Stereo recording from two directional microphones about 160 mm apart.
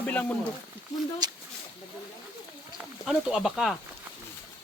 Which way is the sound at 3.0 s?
5° right (ahead or behind).